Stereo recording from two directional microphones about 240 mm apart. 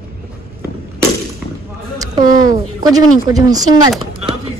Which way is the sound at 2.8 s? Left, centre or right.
Centre.